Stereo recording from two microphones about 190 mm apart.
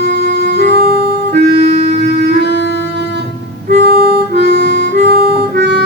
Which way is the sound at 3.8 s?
55° right (ahead or behind).